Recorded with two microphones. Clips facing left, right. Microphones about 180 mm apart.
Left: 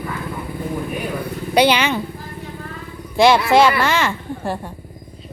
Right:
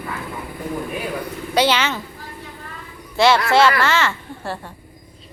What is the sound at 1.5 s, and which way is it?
Speech, 15° left (ahead or behind).